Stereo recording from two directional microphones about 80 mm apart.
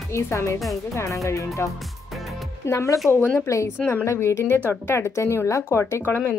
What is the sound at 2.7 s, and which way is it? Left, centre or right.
Speech, left.